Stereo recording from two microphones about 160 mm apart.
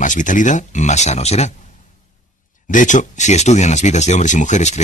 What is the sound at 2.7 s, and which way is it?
Speech, 50° left (ahead or behind).